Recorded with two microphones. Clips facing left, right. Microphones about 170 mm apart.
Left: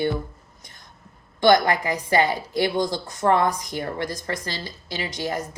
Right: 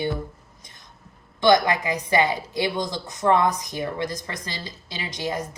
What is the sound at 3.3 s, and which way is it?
Speech, 20° right (ahead or behind).